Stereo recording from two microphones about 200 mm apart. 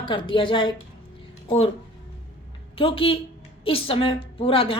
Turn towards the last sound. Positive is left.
turn(degrees=25)  # may be behind; listen again after turning